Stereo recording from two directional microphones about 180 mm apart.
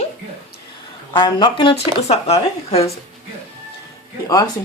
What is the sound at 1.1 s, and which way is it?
Speech, 25° left (ahead or behind).